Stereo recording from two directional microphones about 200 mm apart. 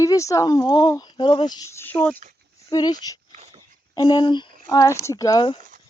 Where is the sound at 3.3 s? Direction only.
35° right (ahead or behind).